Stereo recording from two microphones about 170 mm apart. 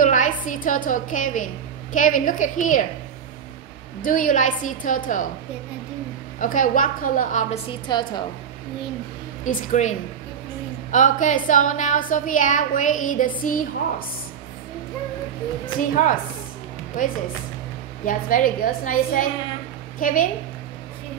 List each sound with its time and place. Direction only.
0.0 s a woman's voice: 50° left (ahead or behind)
4.0 s a woman's voice: 50° left (ahead or behind)
6.4 s a woman's voice: 50° left (ahead or behind)
7.5 s a woman's voice: 25° left (ahead or behind)
9.4 s a woman's voice: 50° left (ahead or behind)
15.9 s a woman's voice: 50° left (ahead or behind)